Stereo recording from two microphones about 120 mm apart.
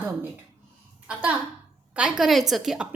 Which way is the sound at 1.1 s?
10° right (ahead or behind).